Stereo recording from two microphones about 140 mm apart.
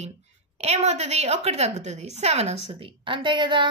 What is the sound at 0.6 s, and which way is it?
A woman's voice, 50° right (ahead or behind).